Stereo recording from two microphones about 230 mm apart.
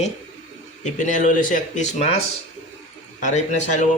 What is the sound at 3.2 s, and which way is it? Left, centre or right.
Speech, left.